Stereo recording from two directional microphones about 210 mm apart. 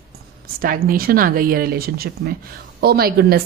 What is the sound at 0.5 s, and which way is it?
Speech, 45° right (ahead or behind).